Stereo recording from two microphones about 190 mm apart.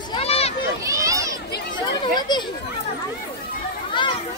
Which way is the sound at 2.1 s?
25° left (ahead or behind).